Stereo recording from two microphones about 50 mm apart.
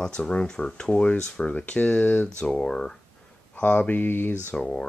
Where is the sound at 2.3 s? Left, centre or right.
Centre.